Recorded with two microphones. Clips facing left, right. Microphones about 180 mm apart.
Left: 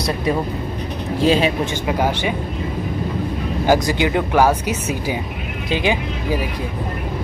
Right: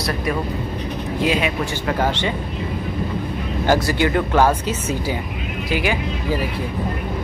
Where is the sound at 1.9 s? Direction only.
15° left (ahead or behind).